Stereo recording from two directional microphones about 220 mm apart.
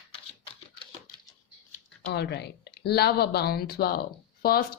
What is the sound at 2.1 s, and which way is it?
Speech, 50° left (ahead or behind).